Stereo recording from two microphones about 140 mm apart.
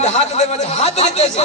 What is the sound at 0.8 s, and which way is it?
Speech, 50° left (ahead or behind).